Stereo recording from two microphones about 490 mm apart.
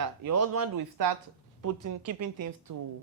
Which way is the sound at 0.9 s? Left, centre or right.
Right.